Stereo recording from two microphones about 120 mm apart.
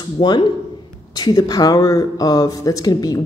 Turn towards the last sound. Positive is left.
turn(degrees=30)  # may be behind; listen again after turning